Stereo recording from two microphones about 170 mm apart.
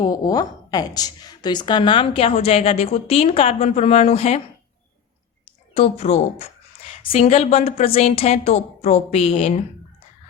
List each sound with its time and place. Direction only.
0.0 s a woman's voice: 20° left (ahead or behind)
5.7 s a woman's voice: 35° left (ahead or behind)